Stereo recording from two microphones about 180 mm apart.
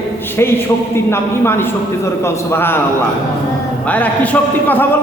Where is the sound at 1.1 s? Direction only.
15° left (ahead or behind).